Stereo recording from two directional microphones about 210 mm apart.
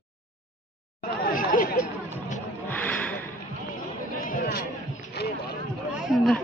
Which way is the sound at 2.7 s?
10° left (ahead or behind).